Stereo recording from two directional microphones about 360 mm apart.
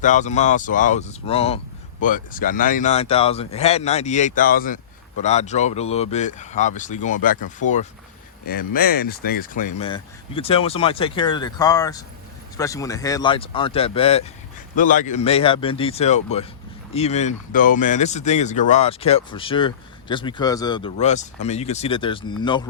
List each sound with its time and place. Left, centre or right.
0.0 s speech: centre